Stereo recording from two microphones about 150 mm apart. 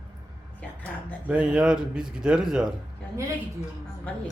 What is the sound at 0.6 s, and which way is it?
Speech, 10° left (ahead or behind).